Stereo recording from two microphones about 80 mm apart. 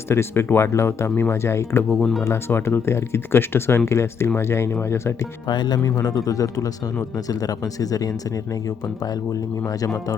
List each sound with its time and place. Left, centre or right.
0.1 s speech: left
1.9 s speech: centre
2.2 s speech: left
5.5 s speech: left
9.6 s speech: left